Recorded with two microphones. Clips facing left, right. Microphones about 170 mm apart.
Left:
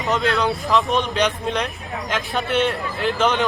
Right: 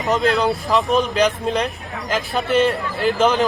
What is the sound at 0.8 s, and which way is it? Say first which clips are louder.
A man's voice: right 4 dB; centre (ahead or behind).